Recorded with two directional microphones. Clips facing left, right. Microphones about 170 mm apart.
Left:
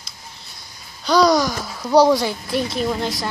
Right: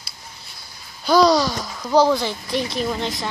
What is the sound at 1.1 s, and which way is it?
A woman's voice, centre (ahead or behind).